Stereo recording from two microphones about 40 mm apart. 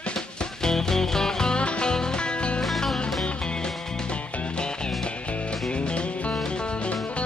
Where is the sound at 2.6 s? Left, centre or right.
Centre.